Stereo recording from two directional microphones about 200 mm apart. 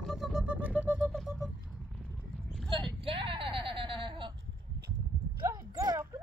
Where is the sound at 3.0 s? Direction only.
25° right (ahead or behind).